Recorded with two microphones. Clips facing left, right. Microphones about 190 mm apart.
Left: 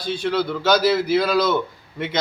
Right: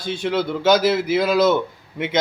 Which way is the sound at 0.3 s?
20° right (ahead or behind).